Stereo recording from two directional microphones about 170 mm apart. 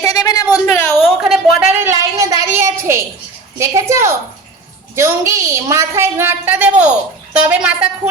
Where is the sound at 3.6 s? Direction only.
15° right (ahead or behind).